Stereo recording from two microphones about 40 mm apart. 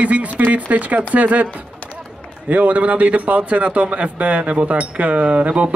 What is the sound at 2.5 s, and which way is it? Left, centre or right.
A man's voice, right.